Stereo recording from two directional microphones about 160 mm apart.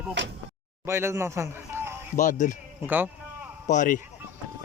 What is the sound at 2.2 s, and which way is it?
Speech, 50° left (ahead or behind).